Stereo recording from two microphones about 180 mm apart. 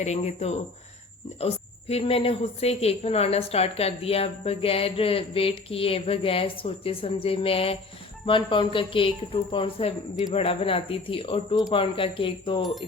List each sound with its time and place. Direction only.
0.0 s a woman's voice: 40° left (ahead or behind)